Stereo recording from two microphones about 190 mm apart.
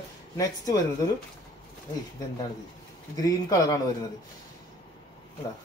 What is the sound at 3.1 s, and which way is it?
Speech, 20° left (ahead or behind).